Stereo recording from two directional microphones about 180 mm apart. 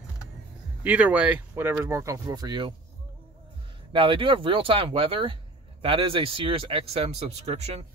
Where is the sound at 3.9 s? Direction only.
30° right (ahead or behind).